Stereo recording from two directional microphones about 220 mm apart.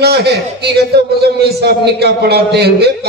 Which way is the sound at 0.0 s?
45° right (ahead or behind).